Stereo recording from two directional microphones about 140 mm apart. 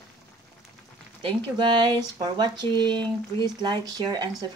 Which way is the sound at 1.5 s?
30° right (ahead or behind).